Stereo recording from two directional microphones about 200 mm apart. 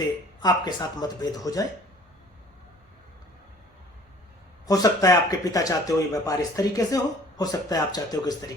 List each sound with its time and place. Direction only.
0.3 s speech: 20° left (ahead or behind)
4.6 s speech: 20° left (ahead or behind)